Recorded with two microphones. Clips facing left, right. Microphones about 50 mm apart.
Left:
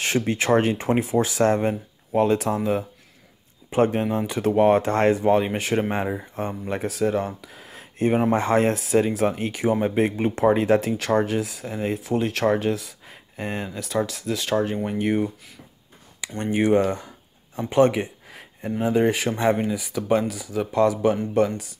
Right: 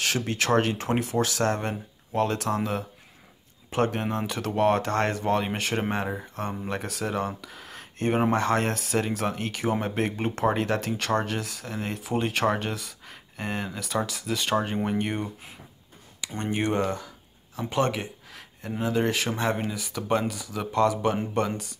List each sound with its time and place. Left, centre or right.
0.0 s speech: left
2.5 s speech: centre
15.0 s speech: centre
16.3 s speech: centre
17.6 s a sound: centre
18.8 s speech: centre